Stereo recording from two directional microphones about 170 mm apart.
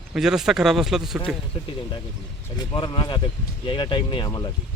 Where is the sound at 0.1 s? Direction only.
5° right (ahead or behind).